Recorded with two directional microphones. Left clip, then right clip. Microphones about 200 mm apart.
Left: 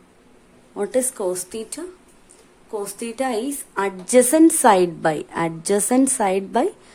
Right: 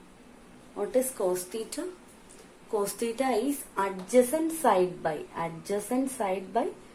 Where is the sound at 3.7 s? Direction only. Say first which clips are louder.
Left 8 dB; 55° left (ahead or behind).